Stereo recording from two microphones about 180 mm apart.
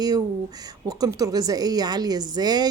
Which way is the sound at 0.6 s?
20° right (ahead or behind).